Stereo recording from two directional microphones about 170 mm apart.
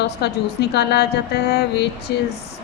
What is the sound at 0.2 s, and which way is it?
A woman's voice, 80° left.